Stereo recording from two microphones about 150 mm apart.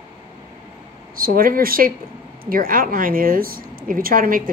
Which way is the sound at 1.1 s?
75° right (ahead or behind).